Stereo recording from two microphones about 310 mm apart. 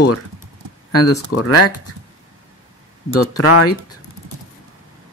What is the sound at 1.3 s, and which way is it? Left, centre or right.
Speech, left.